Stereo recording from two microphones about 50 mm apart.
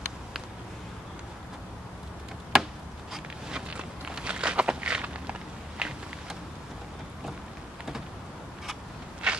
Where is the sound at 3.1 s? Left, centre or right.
Centre.